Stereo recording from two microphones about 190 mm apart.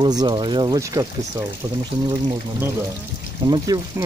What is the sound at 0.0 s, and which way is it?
Speech, 20° right (ahead or behind).